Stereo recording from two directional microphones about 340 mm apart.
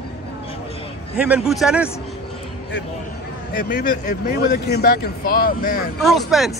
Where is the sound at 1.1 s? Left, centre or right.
Centre.